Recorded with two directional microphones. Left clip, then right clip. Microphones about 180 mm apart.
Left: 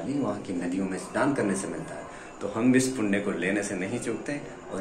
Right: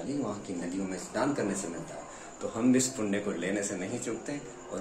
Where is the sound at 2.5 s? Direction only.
10° right (ahead or behind).